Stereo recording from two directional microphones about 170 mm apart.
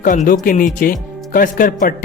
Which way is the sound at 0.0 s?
50° left (ahead or behind).